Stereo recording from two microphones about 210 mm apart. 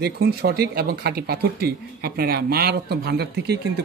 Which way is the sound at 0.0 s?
50° right (ahead or behind).